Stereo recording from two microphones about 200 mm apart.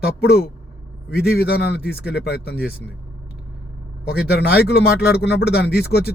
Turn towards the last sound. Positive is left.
turn(degrees=55)  # may be behind; listen again after turning